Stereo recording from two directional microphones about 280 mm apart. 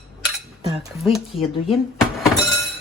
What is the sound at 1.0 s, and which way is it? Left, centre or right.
Speech, centre.